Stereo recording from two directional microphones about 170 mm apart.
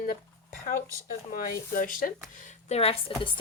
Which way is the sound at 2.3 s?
45° left (ahead or behind).